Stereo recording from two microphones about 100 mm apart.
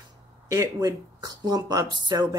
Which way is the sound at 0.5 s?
35° right (ahead or behind).